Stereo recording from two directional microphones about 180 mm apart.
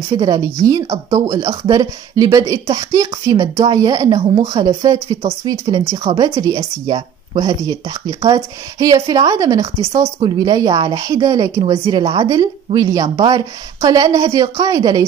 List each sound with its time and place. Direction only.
0.1 s a woman's voice: 20° right (ahead or behind)